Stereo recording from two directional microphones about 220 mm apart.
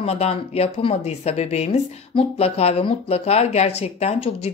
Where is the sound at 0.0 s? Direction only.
30° left (ahead or behind).